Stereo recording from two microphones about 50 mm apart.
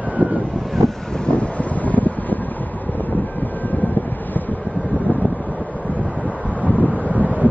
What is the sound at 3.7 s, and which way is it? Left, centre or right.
Vehicle, left.